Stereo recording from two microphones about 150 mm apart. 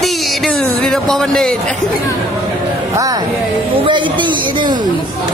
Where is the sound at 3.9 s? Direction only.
35° right (ahead or behind).